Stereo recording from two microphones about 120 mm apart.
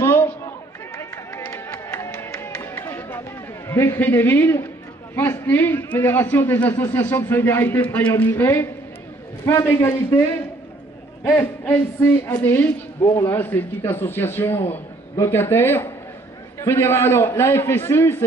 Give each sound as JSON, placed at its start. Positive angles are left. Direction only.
{"t": 0.0, "sound": "run", "side_deg": 20}
{"t": 1.5, "sound": "music", "side_deg": 20}
{"t": 3.6, "sound": "a man's voice", "side_deg": 20}
{"t": 11.6, "sound": "a woman's voice", "side_deg": 15}
{"t": 13.0, "sound": "a man's voice", "side_deg": 25}